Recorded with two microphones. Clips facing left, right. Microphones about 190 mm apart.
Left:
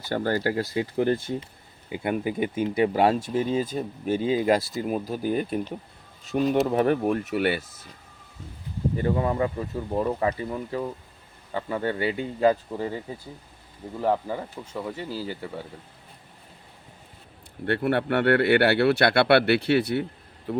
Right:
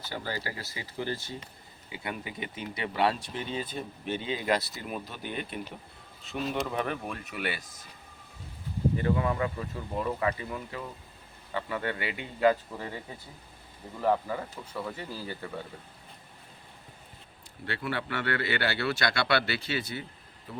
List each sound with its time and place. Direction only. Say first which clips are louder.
0.1 s speech: left 12 dB; 55° left (ahead or behind)
9.0 s speech: left 6 dB; 30° left (ahead or behind); by 15.6 s 15° left (ahead or behind)
17.7 s speech: left 10 dB; 60° left (ahead or behind)